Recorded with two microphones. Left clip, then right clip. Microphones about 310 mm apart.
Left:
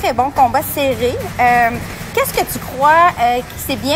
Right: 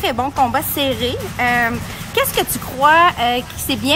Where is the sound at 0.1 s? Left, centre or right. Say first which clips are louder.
Left 7 dB; right.